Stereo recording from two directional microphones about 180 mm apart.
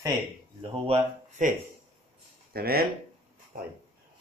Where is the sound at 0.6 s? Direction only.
30° right (ahead or behind).